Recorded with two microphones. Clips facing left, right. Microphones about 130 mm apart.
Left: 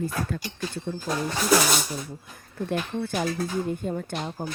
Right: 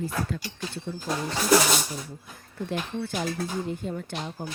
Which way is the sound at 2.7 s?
50° left (ahead or behind).